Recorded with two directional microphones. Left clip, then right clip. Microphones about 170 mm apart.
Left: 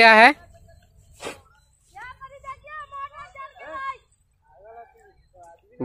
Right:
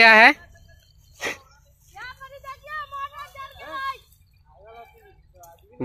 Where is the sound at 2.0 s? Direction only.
65° right (ahead or behind); by 4.0 s 85° right.